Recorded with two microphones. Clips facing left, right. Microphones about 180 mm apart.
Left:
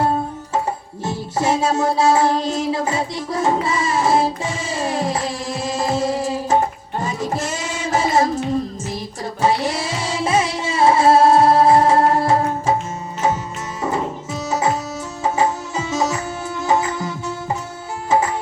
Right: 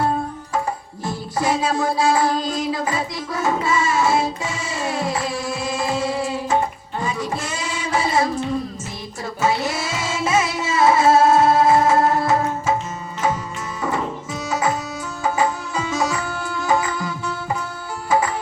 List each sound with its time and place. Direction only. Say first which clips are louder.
1.0 s music: left 2 dB; 25° left (ahead or behind); by 8.2 s 40° left (ahead or behind)
9.4 s music: left 2 dB; 30° left (ahead or behind)
15.2 s music: left 2 dB; 25° left (ahead or behind)